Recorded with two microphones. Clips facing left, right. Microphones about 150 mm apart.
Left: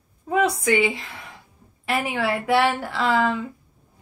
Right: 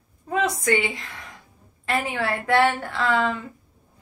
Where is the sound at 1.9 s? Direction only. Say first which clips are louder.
Left 1 dB; 10° left (ahead or behind).